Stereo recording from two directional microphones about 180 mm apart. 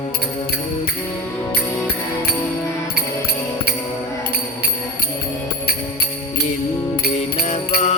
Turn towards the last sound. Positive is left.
turn(degrees=40)  # may be behind; listen again after turning